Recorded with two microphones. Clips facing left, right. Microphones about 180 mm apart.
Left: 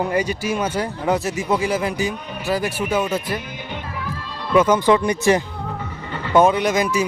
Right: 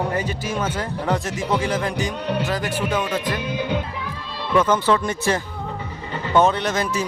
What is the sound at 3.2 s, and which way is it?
Speech, 90° right.